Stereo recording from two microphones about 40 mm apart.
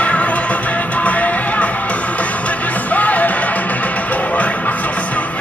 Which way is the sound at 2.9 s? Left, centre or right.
Left.